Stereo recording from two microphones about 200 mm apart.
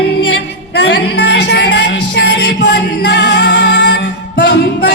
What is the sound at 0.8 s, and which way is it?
Music, 60° left (ahead or behind).